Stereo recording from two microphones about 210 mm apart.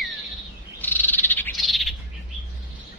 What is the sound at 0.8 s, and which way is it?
Frog, 10° left (ahead or behind).